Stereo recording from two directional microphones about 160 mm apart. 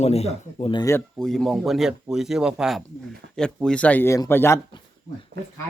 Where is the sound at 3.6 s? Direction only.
10° left (ahead or behind).